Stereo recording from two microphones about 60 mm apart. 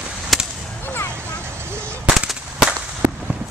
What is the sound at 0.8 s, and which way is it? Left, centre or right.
Vehicle, left.